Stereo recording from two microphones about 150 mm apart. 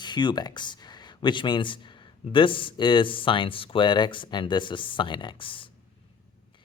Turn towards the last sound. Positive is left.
turn(degrees=35)  # may be behind; listen again after turning